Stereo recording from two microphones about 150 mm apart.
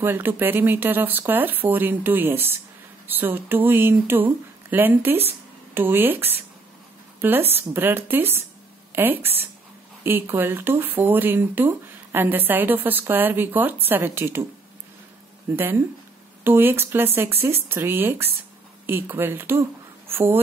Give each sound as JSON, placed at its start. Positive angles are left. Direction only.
{"t": 0.0, "sound": "speech", "side_deg": -15}
{"t": 15.5, "sound": "speech", "side_deg": -15}